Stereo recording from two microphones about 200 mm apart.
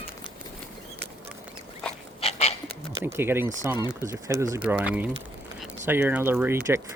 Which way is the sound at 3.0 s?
10° right (ahead or behind).